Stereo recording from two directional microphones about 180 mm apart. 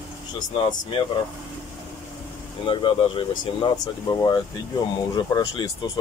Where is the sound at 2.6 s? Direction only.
30° left (ahead or behind).